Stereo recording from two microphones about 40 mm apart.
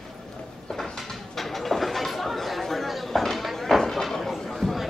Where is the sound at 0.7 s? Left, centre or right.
Centre.